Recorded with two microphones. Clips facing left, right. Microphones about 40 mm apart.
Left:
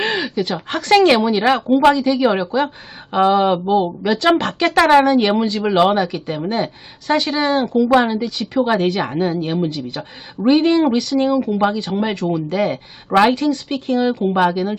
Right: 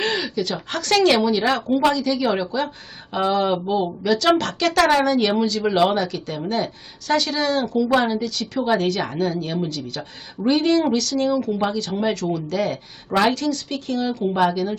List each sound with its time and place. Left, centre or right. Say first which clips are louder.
0.0 s a woman's voice: left 3 dB; left